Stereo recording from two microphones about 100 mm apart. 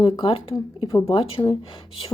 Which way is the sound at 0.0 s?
65° left (ahead or behind).